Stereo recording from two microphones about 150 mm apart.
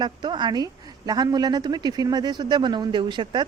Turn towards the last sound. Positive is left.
turn(degrees=-30)  # may be behind; listen again after turning